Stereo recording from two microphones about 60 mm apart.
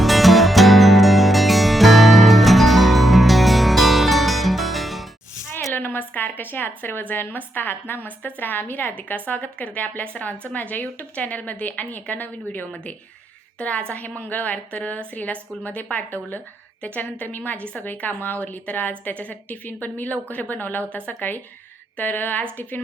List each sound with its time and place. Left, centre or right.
0.0 s music: centre
5.7 s a woman's voice: left